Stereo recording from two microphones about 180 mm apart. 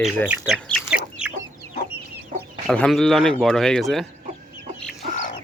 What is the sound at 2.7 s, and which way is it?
Speech, centre (ahead or behind).